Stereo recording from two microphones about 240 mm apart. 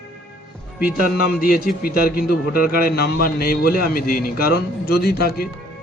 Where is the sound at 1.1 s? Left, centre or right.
Left.